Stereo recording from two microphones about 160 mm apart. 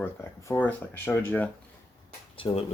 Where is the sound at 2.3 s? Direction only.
35° left (ahead or behind).